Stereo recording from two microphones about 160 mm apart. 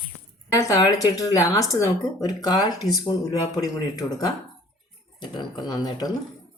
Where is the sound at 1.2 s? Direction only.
20° left (ahead or behind).